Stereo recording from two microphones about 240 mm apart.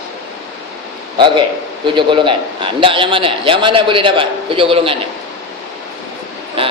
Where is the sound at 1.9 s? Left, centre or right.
Centre.